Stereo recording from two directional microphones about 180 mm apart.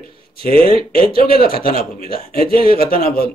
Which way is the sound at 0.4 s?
55° left (ahead or behind).